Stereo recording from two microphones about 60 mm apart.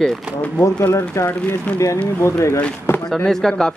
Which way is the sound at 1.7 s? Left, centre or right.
Left.